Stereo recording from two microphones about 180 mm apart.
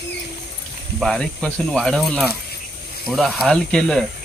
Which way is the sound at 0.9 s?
5° left (ahead or behind).